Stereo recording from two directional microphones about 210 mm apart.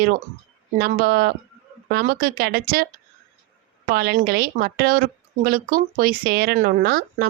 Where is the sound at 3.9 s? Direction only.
50° right (ahead or behind).